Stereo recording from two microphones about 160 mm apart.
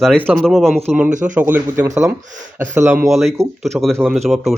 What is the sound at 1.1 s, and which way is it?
Speech, 50° right (ahead or behind).